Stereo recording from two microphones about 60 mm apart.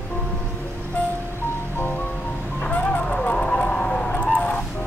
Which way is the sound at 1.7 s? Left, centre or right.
Left.